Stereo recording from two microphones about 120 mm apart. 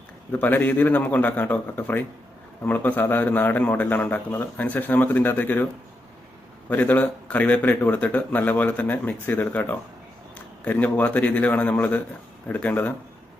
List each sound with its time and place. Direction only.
0.3 s speech: 15° left (ahead or behind)
6.7 s speech: 15° left (ahead or behind)